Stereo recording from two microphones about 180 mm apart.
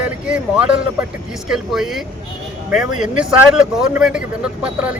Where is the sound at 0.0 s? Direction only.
5° right (ahead or behind).